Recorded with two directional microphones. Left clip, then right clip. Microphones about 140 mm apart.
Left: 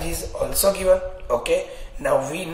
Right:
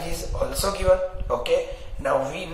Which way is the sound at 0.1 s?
20° left (ahead or behind).